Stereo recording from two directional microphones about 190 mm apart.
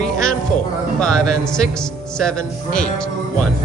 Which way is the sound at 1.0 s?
5° left (ahead or behind).